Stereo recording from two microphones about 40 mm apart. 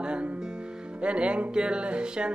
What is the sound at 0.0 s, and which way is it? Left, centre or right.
Music, right.